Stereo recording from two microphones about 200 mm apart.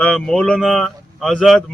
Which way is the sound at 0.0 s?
5° left (ahead or behind).